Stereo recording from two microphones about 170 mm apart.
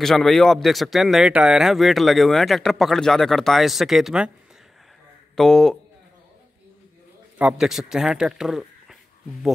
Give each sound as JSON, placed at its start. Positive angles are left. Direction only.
{"t": 0.0, "sound": "speech", "side_deg": 0}
{"t": 5.3, "sound": "speech", "side_deg": 5}
{"t": 7.3, "sound": "speech", "side_deg": -5}